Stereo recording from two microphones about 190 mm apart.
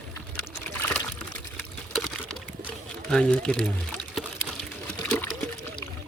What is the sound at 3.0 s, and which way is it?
Speech, 5° left (ahead or behind).